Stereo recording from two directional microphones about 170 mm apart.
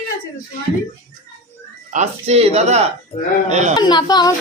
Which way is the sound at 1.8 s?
40° right (ahead or behind).